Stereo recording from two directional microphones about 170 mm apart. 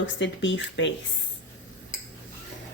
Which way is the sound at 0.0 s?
90° left.